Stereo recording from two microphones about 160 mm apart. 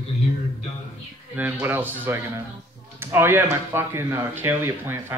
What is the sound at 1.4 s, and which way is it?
Speech, 10° right (ahead or behind).